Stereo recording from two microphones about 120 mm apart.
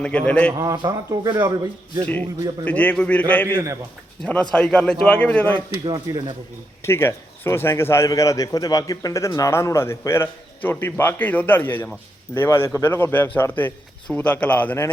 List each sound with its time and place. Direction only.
0.0 s a man's voice: 10° left (ahead or behind)
0.6 s speech: 30° right (ahead or behind)
2.6 s a man's voice: 10° left (ahead or behind)
5.8 s speech: 40° right (ahead or behind)
6.8 s a man's voice: 20° left (ahead or behind)